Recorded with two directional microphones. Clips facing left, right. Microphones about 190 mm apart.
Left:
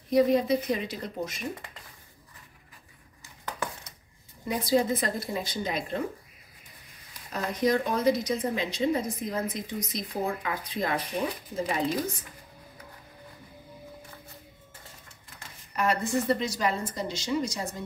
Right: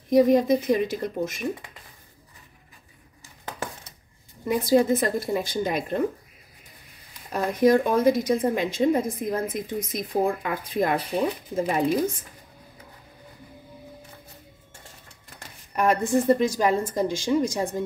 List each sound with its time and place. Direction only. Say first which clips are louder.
0.1 s a woman's voice: right 4 dB; 45° right (ahead or behind)
3.4 s a sound: right 1 dB; 50° right (ahead or behind)
4.5 s a woman's voice: right 5 dB; 50° right (ahead or behind)
7.3 s a woman's voice: right 7 dB; 50° right (ahead or behind)
15.2 s speech: right 4 dB; 55° right (ahead or behind)